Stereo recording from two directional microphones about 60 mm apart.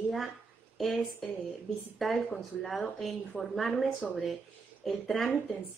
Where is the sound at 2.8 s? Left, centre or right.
Centre.